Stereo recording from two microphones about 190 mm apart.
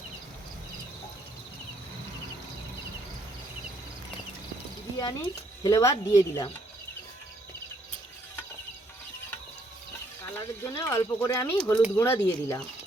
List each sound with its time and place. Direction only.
4.9 s speech: 20° left (ahead or behind)
10.6 s speech: 15° left (ahead or behind)